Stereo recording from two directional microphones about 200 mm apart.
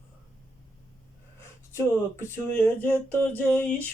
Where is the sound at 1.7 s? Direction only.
10° left (ahead or behind).